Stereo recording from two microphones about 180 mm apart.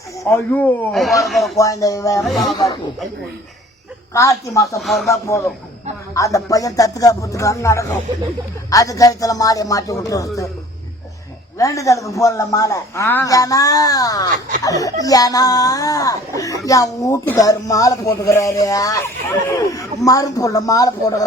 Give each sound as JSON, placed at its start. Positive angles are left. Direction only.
{"t": 0.3, "sound": "a man's voice", "side_deg": 10}
{"t": 1.5, "sound": "a man's voice", "side_deg": 20}
{"t": 2.2, "sound": "a man's voice", "side_deg": 0}
{"t": 4.1, "sound": "a man's voice", "side_deg": 15}
{"t": 4.8, "sound": "a man's voice", "side_deg": 0}
{"t": 5.0, "sound": "a man's voice", "side_deg": 15}
{"t": 11.5, "sound": "a man's voice", "side_deg": 20}